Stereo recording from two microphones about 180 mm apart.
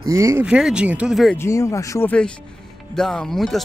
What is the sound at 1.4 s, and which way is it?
Speech, 15° left (ahead or behind).